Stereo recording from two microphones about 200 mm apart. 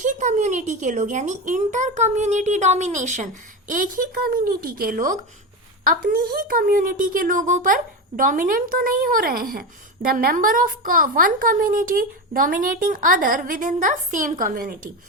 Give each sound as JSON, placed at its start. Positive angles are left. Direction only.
{"t": 0.0, "sound": "a woman's voice", "side_deg": -40}